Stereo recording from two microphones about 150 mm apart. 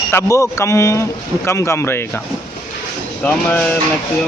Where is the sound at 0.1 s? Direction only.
20° left (ahead or behind).